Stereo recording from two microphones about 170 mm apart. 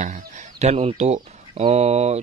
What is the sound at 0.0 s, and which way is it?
Speech, 45° right (ahead or behind).